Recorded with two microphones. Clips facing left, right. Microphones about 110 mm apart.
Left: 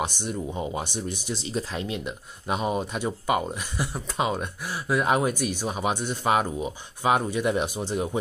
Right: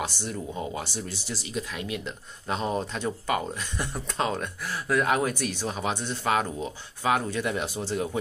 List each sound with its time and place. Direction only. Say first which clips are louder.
0.0 s speech: left 3 dB; 20° left (ahead or behind)
1.5 s speech: left 2 dB; 30° left (ahead or behind)
2.0 s speech: left 2 dB; 15° left (ahead or behind)